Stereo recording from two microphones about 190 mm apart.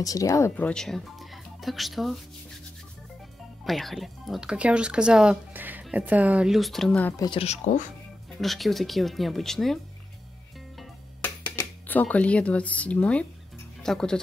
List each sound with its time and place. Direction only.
0.0 s speech: 20° left (ahead or behind); by 2.1 s centre (ahead or behind)
3.6 s speech: centre (ahead or behind)
7.2 s speech: 25° left (ahead or behind)
8.4 s speech: centre (ahead or behind)
10.8 s music: 10° left (ahead or behind)
13.8 s speech: 5° left (ahead or behind)